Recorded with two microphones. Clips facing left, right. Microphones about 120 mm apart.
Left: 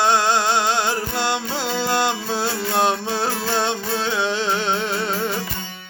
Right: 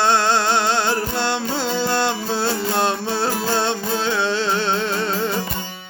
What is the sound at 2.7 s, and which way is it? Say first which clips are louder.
Music: even; 15° left (ahead or behind).